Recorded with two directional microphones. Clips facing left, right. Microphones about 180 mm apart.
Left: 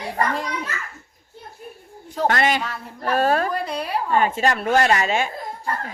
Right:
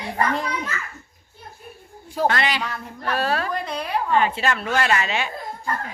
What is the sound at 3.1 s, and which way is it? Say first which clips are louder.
Speech: left 5 dB; 45° left (ahead or behind).